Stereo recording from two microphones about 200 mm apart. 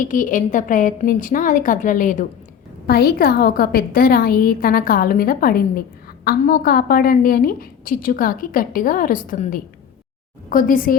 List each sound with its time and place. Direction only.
0.0 s a woman's voice: 40° left (ahead or behind)